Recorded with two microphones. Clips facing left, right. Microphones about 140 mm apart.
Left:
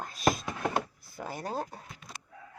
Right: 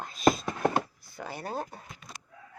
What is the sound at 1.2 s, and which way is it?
Speech, 45° left (ahead or behind).